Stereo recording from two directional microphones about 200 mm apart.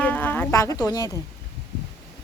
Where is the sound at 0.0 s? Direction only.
10° left (ahead or behind).